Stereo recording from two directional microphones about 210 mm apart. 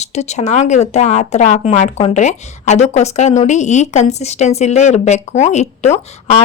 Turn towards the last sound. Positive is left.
turn(degrees=30)  # may be behind; listen again after turning